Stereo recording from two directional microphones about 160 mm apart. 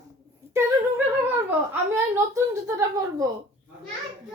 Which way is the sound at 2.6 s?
20° right (ahead or behind).